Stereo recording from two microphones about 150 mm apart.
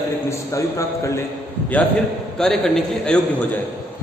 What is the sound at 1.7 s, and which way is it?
A man's voice, 10° left (ahead or behind).